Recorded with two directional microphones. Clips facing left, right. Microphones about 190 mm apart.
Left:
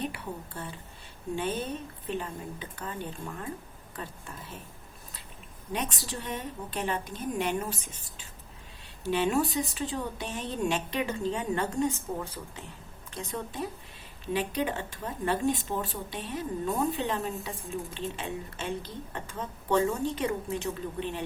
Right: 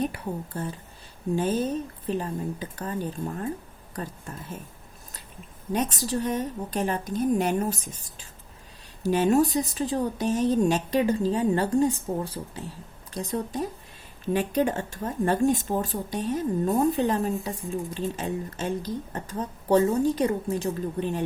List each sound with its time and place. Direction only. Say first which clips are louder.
0.0 s a woman's voice: right 6 dB; 40° right (ahead or behind)
5.7 s speech: right 8 dB; 40° right (ahead or behind)
9.0 s a woman's voice: right 6 dB; 40° right (ahead or behind)